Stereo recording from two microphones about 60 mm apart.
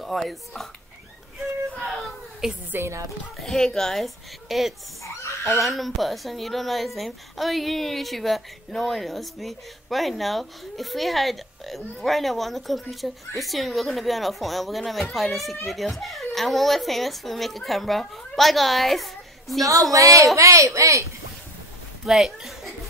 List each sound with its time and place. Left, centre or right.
0.0 s a woman's voice: centre
2.4 s a woman's voice: centre
3.3 s a woman's voice: centre
5.0 s a sound: left
5.6 s a woman's voice: centre
19.6 s a woman's voice: right
22.0 s a child's voice: centre